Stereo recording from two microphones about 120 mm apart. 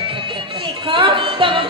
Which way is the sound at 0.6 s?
45° right (ahead or behind).